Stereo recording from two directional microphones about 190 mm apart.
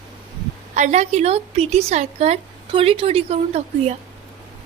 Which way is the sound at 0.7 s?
35° right (ahead or behind).